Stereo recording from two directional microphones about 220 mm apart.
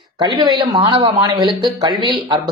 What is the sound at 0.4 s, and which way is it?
Speech, 20° right (ahead or behind).